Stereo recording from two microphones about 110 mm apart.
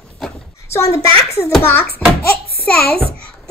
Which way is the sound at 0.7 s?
25° left (ahead or behind).